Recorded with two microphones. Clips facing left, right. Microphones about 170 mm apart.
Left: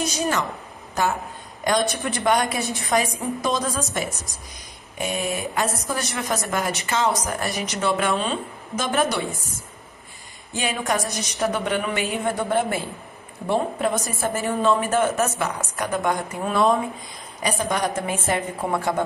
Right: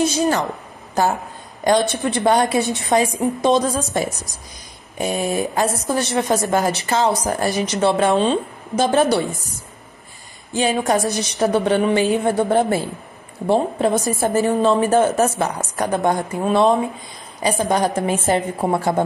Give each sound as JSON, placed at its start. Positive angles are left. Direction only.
{"t": 0.0, "sound": "speech", "side_deg": -30}
{"t": 1.6, "sound": "a woman's voice", "side_deg": -30}
{"t": 10.5, "sound": "speech", "side_deg": -30}